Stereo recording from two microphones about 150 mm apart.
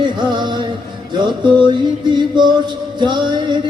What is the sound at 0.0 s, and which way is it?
Music, 30° right (ahead or behind).